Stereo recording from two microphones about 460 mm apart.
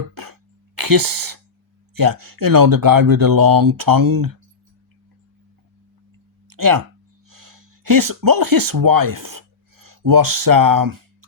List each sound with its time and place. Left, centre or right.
0.1 s throat clearing: right
0.8 s speech: right
6.5 s speech: right